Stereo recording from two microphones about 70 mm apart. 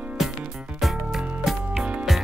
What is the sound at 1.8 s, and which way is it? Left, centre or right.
Music, centre.